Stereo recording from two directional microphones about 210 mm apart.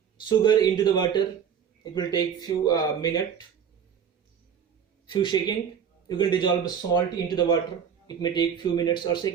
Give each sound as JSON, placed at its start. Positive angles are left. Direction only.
{"t": 0.3, "sound": "a man's voice", "side_deg": 20}
{"t": 5.0, "sound": "a man's voice", "side_deg": 20}